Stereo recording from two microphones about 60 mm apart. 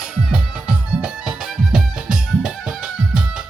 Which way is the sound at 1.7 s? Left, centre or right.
Centre.